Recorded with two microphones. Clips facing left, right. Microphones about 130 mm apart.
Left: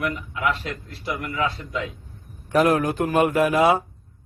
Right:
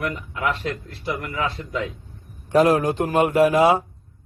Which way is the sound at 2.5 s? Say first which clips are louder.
Right 2 dB; 30° right (ahead or behind).